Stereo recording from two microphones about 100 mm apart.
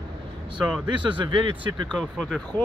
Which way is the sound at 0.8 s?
50° right (ahead or behind).